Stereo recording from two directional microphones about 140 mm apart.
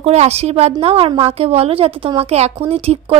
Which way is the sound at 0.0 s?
50° right (ahead or behind).